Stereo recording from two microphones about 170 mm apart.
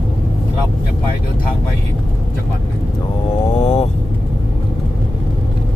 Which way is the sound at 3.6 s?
35° left (ahead or behind).